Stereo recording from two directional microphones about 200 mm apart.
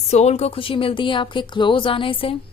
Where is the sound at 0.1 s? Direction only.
35° left (ahead or behind).